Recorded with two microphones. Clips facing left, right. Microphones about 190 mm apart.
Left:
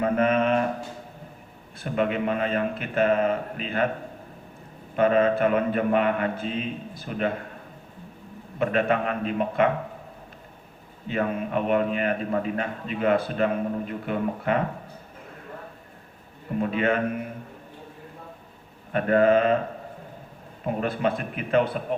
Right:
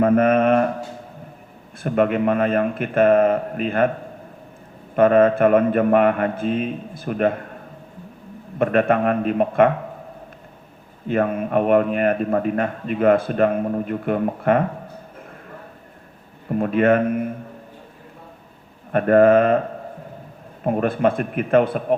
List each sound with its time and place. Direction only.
0.0 s mantra: 50° right (ahead or behind)
1.8 s a man's voice: 50° right (ahead or behind)
4.9 s a man's voice: 50° right (ahead or behind)
8.5 s a man's voice: 50° right (ahead or behind)
11.1 s a man's voice: 50° right (ahead or behind)
16.6 s a man's voice: 50° right (ahead or behind)
18.9 s a man's voice: 50° right (ahead or behind)
20.7 s a man's voice: 50° right (ahead or behind)